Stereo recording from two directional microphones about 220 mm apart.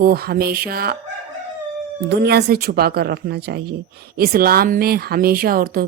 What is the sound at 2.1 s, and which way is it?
Speech, 50° right (ahead or behind).